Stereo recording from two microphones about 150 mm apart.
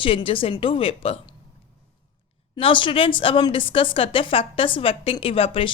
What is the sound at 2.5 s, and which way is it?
A woman's voice, 35° left (ahead or behind).